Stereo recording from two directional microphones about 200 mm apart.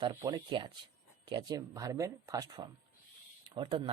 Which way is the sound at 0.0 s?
20° right (ahead or behind).